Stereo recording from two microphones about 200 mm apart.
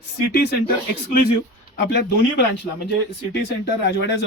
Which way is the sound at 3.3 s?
55° left (ahead or behind).